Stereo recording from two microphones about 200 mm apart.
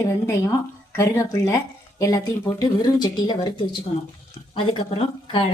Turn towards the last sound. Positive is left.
turn(degrees=30)  # may be behind; listen again after turning